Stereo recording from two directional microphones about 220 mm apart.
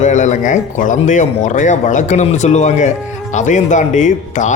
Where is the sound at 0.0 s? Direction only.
35° left (ahead or behind).